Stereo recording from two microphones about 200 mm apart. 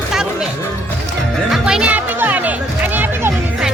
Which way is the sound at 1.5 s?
5° right (ahead or behind).